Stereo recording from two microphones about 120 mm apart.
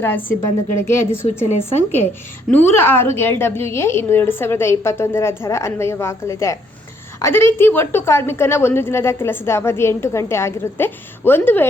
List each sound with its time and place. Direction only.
0.3 s a woman's voice: 20° left (ahead or behind)
1.5 s a woman's voice: 65° left (ahead or behind)
2.5 s a woman's voice: 15° left (ahead or behind)